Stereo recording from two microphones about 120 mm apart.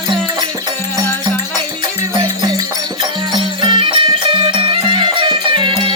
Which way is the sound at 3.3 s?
45° right (ahead or behind).